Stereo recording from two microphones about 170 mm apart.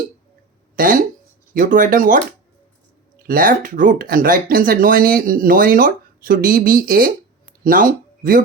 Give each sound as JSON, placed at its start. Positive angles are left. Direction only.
{"t": 0.8, "sound": "speech", "side_deg": -55}
{"t": 3.2, "sound": "speech", "side_deg": -55}